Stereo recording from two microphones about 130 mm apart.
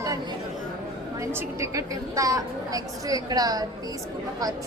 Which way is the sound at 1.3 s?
25° right (ahead or behind).